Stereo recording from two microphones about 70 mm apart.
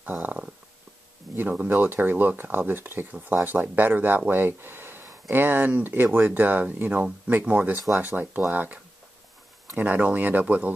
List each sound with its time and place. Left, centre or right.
0.0 s speech: right
1.7 s speech: right
9.8 s speech: right